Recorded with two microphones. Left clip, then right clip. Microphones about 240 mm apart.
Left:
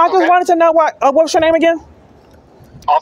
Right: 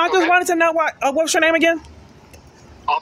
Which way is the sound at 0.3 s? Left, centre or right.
Centre.